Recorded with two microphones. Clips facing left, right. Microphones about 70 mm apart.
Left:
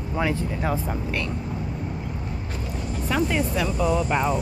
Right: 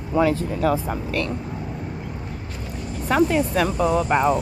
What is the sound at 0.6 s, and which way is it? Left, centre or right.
Speech, right.